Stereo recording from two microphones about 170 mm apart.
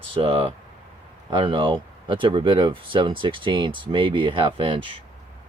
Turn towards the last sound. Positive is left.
turn(degrees=-30)  # may be behind; listen again after turning